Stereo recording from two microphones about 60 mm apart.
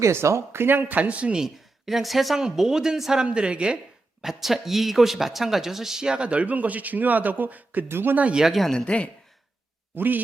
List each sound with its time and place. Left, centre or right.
0.0 s speech: right
0.9 s speech: right
4.2 s speech: centre; by 7.9 s right
7.9 s speech: right
8.1 s speech: right
8.4 s speech: centre
8.7 s speech: centre
9.9 s speech: right